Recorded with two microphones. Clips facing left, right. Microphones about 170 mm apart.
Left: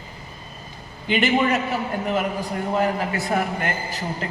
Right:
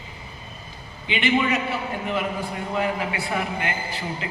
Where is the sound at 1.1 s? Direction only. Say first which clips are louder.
Left 2 dB; 40° left (ahead or behind).